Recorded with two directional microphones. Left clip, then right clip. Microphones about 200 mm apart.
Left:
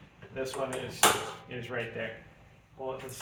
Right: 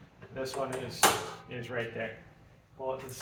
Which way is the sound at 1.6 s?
15° left (ahead or behind).